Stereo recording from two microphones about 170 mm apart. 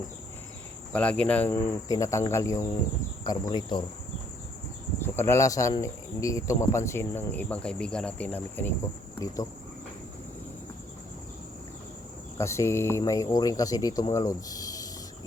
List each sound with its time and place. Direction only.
0.9 s speech: 5° left (ahead or behind); by 3.8 s 25° left (ahead or behind)
4.9 s speech: 15° left (ahead or behind)
12.4 s speech: 15° left (ahead or behind)